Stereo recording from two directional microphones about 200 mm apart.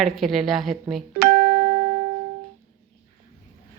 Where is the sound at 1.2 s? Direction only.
50° right (ahead or behind).